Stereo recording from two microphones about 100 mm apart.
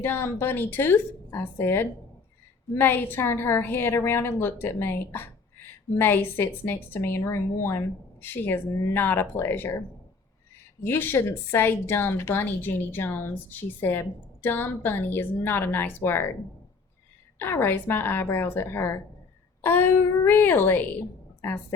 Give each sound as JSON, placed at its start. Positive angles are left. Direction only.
{"t": 0.0, "sound": "a woman's voice", "side_deg": 25}
{"t": 10.8, "sound": "a woman's voice", "side_deg": 20}
{"t": 17.4, "sound": "a woman's voice", "side_deg": 20}